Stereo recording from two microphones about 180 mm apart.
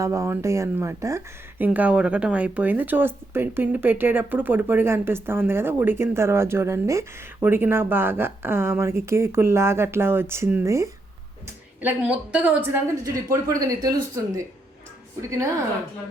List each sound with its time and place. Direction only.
0.0 s speech: 15° right (ahead or behind)